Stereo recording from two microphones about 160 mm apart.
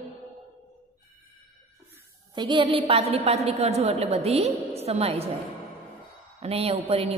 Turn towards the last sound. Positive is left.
turn(degrees=-40)  # may be behind; listen again after turning